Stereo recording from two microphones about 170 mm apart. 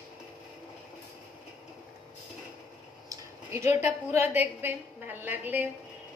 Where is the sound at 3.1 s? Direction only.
15° right (ahead or behind).